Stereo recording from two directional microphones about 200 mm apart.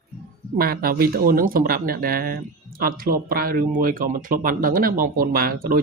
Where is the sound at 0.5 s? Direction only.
50° right (ahead or behind).